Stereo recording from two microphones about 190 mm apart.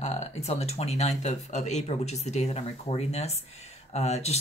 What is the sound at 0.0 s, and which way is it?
Speech, 35° left (ahead or behind).